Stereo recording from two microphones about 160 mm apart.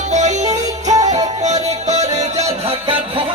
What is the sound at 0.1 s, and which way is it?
Music, 45° right (ahead or behind).